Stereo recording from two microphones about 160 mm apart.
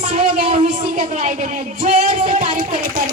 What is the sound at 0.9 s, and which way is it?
Speech, 50° right (ahead or behind).